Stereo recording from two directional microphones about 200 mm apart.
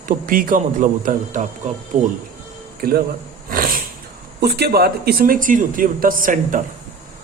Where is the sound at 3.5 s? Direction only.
45° right (ahead or behind).